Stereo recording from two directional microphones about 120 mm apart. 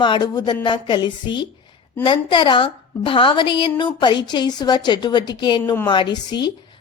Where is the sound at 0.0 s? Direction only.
40° left (ahead or behind).